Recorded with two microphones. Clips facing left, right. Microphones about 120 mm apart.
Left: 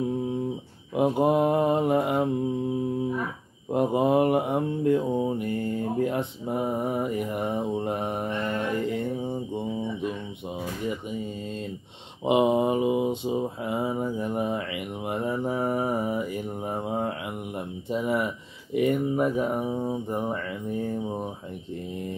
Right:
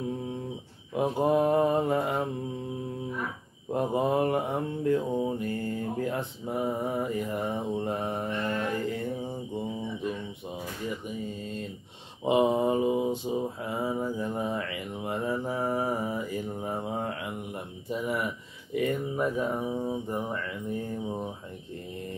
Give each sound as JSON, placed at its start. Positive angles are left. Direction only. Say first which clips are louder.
{"t": 0.9, "sound": "mantra", "louder": "left 3 dB", "side_deg": 20}
{"t": 3.7, "sound": "mantra", "louder": "left 4 dB", "side_deg": 20}
{"t": 12.3, "sound": "mantra", "louder": "left 2 dB", "side_deg": 20}
{"t": 17.8, "sound": "speech", "louder": "left 4 dB", "side_deg": 25}
{"t": 19.1, "sound": "mantra", "louder": "left 4 dB", "side_deg": 10}